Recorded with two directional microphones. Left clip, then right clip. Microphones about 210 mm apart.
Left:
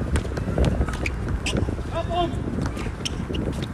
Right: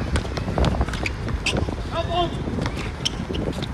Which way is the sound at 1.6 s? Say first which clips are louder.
Right 2 dB; 5° right (ahead or behind).